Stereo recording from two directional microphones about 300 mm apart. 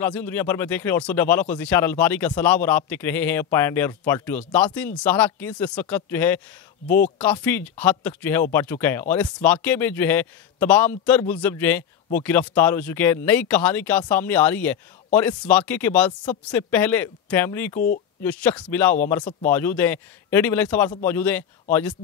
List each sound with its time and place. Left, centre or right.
0.0 s a man's voice: centre
17.7 s speech: left
18.2 s a man's voice: centre